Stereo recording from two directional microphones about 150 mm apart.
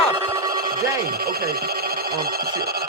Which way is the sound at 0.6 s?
85° right.